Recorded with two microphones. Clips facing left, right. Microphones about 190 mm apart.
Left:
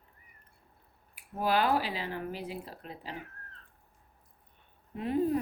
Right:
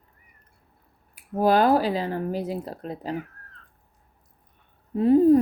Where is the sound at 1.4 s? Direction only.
40° right (ahead or behind).